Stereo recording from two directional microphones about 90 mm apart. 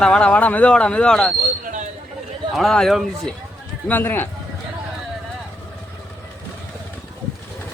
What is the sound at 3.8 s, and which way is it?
Speech, 20° left (ahead or behind).